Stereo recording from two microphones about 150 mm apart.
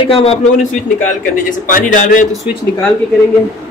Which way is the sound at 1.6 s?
60° left (ahead or behind).